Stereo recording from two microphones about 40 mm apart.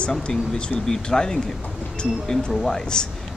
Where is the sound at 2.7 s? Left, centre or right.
Centre.